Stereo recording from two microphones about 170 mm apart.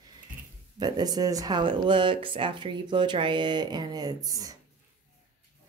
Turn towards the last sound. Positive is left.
turn(degrees=-20)  # may be behind; listen again after turning